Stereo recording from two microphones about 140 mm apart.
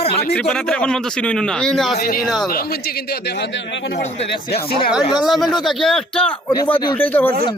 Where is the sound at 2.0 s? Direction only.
90° left.